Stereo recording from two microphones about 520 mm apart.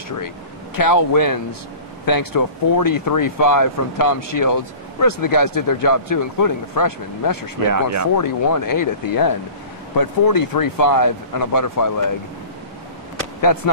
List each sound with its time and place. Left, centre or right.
0.7 s speech: left
7.7 s speech: right
8.2 s speech: left